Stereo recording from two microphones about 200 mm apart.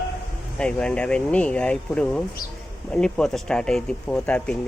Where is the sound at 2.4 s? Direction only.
45° left (ahead or behind).